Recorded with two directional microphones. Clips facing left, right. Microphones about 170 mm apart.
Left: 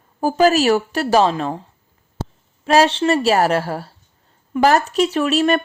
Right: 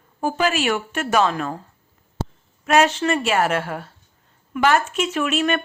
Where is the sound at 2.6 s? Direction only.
30° left (ahead or behind).